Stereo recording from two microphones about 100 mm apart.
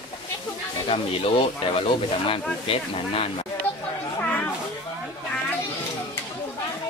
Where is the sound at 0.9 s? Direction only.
65° left (ahead or behind).